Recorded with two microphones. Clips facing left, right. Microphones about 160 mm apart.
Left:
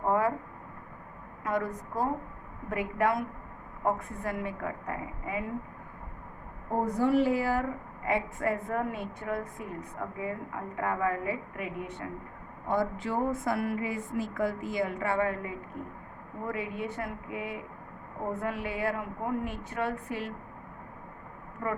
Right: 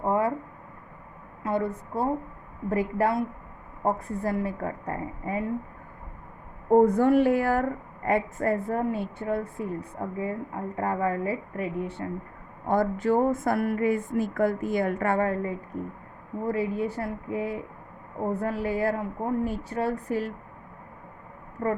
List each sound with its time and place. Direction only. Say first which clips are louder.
0.1 s a sound: right 2 dB; 25° right (ahead or behind)
1.5 s a woman's voice: right 4 dB; 25° right (ahead or behind)
6.8 s a woman's voice: right 5 dB; 55° right (ahead or behind); by 12.0 s 35° right (ahead or behind)
12.6 s a woman's voice: right 6 dB; 45° right (ahead or behind)
21.6 s a woman's voice: right 5 dB; 40° right (ahead or behind)